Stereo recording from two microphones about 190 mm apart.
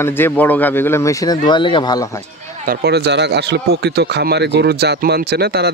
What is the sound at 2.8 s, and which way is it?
Speech, 60° right (ahead or behind).